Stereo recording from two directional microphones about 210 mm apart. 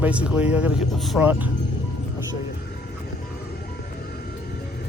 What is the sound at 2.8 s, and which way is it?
Vehicle, 45° left (ahead or behind).